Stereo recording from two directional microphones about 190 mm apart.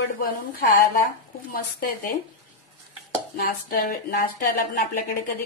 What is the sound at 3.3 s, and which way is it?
Dishes, 50° left (ahead or behind).